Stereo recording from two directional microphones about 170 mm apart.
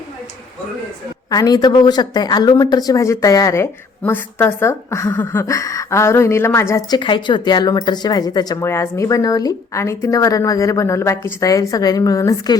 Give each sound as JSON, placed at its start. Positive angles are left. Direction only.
{"t": 1.3, "sound": "speech", "side_deg": 25}